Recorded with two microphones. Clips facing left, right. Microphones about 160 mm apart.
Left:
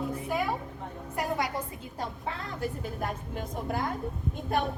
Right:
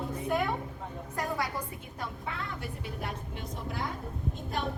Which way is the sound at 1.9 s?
35° left (ahead or behind).